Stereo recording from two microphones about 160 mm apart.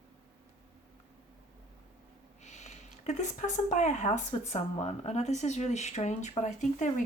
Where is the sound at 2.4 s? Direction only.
45° left (ahead or behind).